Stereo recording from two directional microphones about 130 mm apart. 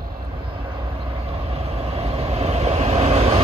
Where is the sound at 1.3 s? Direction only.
50° right (ahead or behind).